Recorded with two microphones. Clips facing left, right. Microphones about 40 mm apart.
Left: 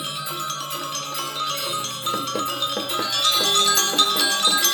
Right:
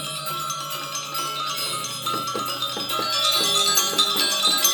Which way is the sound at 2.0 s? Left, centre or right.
Left.